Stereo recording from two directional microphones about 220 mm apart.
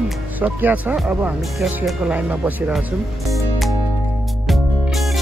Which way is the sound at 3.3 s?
Centre (ahead or behind).